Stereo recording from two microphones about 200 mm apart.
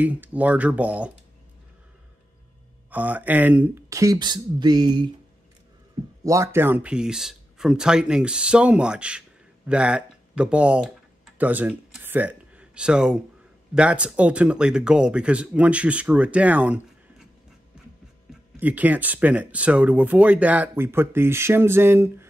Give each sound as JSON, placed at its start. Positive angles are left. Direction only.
{"t": 0.0, "sound": "speech", "side_deg": -5}
{"t": 2.9, "sound": "speech", "side_deg": -10}
{"t": 6.2, "sound": "speech", "side_deg": -15}
{"t": 18.6, "sound": "speech", "side_deg": -10}